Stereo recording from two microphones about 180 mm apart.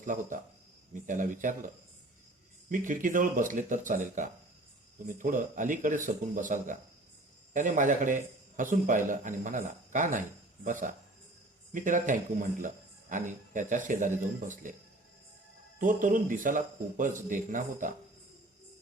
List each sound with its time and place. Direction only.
0.0 s a man's voice: 45° right (ahead or behind)
15.8 s a man's voice: 45° right (ahead or behind)